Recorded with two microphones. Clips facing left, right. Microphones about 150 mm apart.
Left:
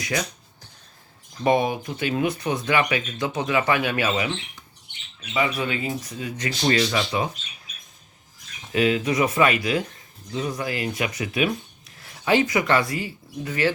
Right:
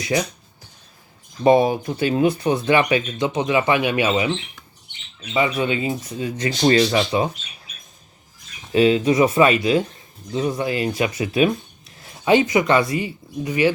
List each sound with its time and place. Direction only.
0.0 s speech: 25° right (ahead or behind)
1.5 s speech: 30° right (ahead or behind)
5.3 s speech: 25° right (ahead or behind)
8.7 s speech: 30° right (ahead or behind)